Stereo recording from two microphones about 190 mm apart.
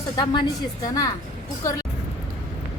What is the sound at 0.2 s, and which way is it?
Speech, 20° left (ahead or behind).